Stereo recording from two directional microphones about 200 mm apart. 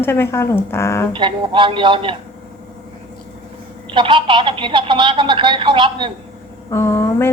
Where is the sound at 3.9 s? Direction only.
25° right (ahead or behind).